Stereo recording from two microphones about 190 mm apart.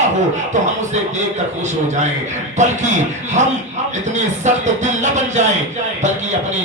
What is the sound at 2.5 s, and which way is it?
Music, 40° right (ahead or behind).